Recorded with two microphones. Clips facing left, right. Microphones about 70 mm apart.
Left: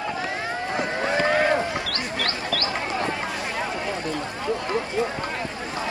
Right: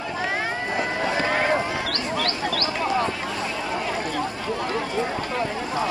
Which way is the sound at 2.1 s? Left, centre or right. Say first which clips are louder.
Right 2 dB; left.